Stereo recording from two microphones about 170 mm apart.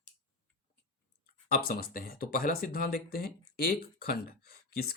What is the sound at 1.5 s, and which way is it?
Speech, 60° left (ahead or behind).